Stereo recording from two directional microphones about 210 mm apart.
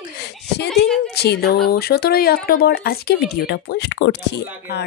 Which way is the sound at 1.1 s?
50° left (ahead or behind).